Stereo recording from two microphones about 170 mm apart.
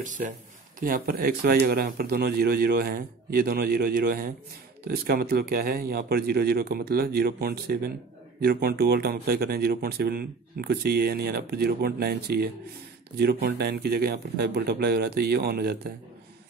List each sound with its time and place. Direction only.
0.7 s speech: 55° right (ahead or behind)